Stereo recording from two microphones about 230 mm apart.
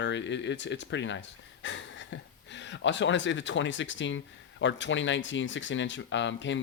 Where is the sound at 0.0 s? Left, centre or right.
Left.